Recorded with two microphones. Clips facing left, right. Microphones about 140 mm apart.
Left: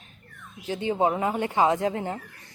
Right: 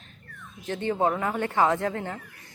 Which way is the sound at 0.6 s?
10° left (ahead or behind).